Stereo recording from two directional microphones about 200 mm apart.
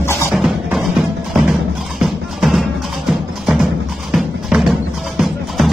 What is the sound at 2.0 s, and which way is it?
Music, centre (ahead or behind).